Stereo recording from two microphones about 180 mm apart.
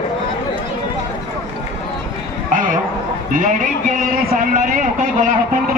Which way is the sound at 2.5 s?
45° right (ahead or behind).